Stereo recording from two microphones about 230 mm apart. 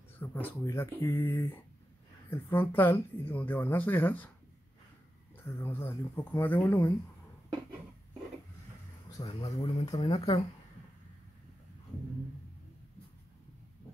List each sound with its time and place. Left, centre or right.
0.2 s speech: centre
5.4 s speech: centre
9.2 s speech: left